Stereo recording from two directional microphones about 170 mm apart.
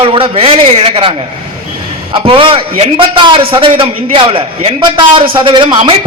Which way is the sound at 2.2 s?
30° right (ahead or behind).